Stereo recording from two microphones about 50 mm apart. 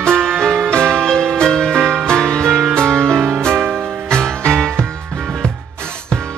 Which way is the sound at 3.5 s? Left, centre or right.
Right.